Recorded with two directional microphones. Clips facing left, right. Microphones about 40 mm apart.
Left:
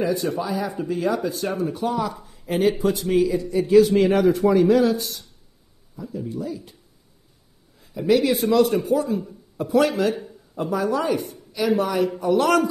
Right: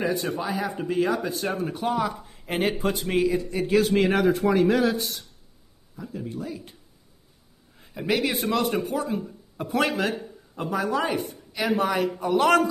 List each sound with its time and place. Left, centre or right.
0.0 s a woman's voice: right
8.1 s a woman's voice: right